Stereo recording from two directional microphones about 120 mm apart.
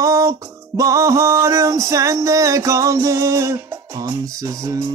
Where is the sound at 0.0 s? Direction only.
25° right (ahead or behind).